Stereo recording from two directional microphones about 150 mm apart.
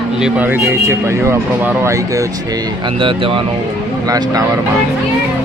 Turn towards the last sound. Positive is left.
turn(degrees=-25)  # may be behind; listen again after turning